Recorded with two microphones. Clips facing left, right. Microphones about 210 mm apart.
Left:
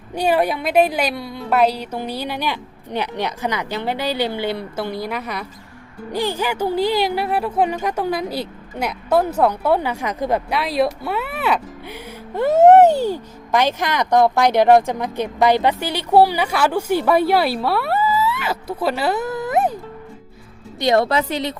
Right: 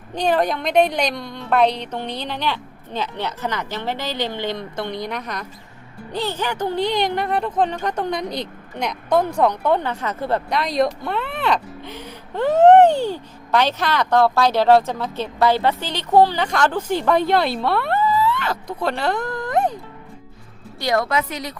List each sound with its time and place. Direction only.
0.1 s speech: 10° left (ahead or behind)
20.7 s a woman's voice: 25° left (ahead or behind)